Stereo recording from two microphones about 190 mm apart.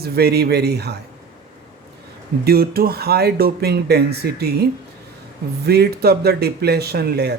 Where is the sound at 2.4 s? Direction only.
55° right (ahead or behind).